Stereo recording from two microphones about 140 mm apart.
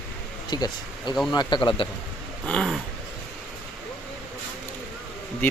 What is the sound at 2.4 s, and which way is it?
Speech, 5° left (ahead or behind).